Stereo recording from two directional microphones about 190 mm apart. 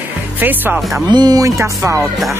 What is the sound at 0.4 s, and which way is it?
Speech, 10° right (ahead or behind).